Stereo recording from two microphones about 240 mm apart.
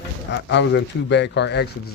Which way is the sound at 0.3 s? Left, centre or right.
Left.